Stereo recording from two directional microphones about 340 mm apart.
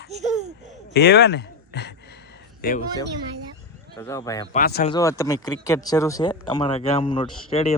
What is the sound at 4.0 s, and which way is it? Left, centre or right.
Speech, centre.